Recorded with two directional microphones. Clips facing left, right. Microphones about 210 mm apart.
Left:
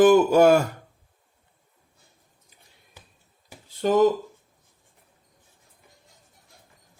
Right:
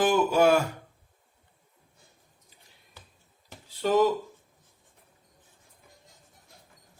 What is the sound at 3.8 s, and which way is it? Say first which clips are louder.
Speech: left 3 dB; 50° left (ahead or behind).